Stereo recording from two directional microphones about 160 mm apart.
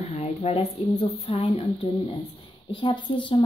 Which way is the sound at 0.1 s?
40° left (ahead or behind).